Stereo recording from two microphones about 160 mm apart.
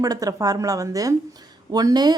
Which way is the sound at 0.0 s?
20° right (ahead or behind).